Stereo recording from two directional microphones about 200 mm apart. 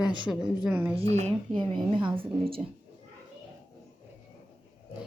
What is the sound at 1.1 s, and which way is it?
A woman's voice, 30° right (ahead or behind).